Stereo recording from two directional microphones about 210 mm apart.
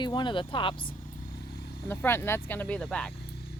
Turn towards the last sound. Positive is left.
turn(degrees=5)  # may be behind; listen again after turning